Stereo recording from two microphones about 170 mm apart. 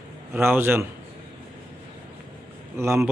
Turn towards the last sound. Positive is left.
turn(degrees=-15)  # may be behind; listen again after turning